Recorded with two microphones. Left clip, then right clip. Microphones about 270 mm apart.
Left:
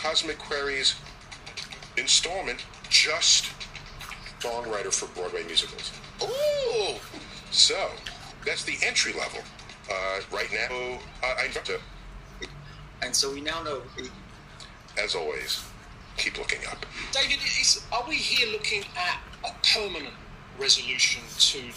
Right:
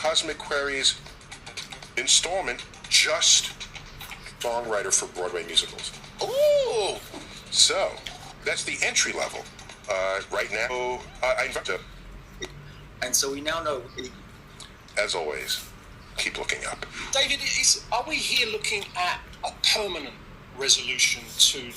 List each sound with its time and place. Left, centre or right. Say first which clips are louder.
0.0 s a man's voice: right 2 dB; right
13.0 s speech: right 1 dB; right